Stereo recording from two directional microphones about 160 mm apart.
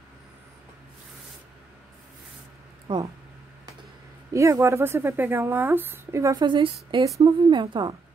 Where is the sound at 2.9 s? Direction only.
30° right (ahead or behind).